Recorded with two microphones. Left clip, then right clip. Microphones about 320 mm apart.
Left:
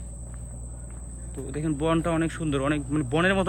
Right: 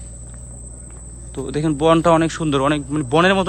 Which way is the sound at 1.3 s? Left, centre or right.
Centre.